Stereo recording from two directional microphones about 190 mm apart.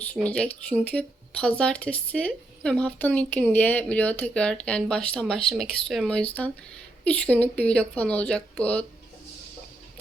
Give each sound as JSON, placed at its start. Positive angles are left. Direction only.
{"t": 0.0, "sound": "speech", "side_deg": 5}